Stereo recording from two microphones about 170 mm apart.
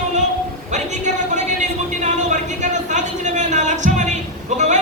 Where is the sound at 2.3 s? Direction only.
45° right (ahead or behind).